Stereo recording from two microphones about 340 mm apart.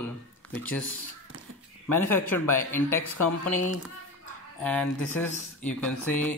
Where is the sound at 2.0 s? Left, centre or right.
Left.